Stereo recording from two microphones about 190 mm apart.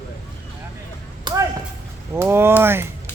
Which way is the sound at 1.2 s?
15° right (ahead or behind).